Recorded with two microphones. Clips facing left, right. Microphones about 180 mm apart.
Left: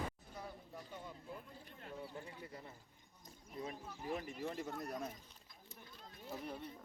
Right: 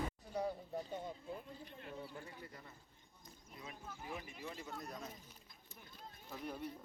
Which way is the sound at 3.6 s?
35° left (ahead or behind).